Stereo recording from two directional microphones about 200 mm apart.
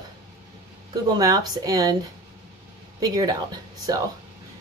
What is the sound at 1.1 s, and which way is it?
Speech, 20° right (ahead or behind).